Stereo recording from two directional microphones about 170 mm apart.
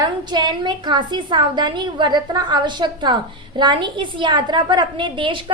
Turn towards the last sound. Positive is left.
turn(degrees=-30)  # may be behind; listen again after turning